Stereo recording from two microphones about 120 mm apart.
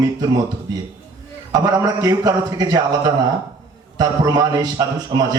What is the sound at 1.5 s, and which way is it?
A man's voice, 30° right (ahead or behind).